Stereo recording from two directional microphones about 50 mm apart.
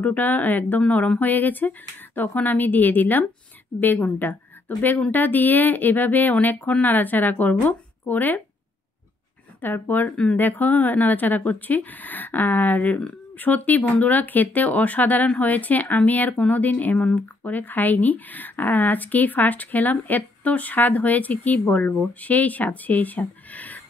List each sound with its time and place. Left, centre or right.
0.0 s speech: left
9.6 s speech: left